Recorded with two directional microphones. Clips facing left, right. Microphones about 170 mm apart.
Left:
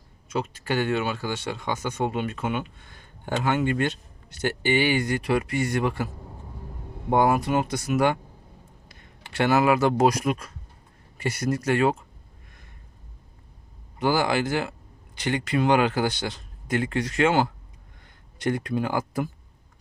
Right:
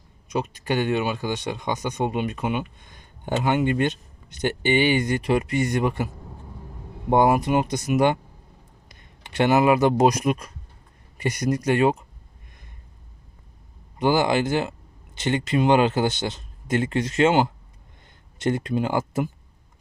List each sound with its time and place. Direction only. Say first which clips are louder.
0.3 s speech: right 2 dB; 15° right (ahead or behind)
7.1 s speech: right 2 dB; 20° right (ahead or behind)
14.0 s speech: right 3 dB; 20° right (ahead or behind)